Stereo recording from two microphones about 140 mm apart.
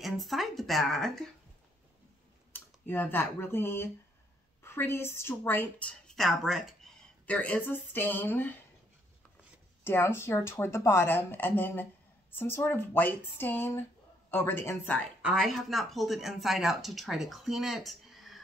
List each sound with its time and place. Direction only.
0.0 s speech: centre (ahead or behind)
2.5 s speech: 15° left (ahead or behind)
7.2 s speech: 10° left (ahead or behind)
9.8 s speech: 15° left (ahead or behind)
15.2 s speech: centre (ahead or behind)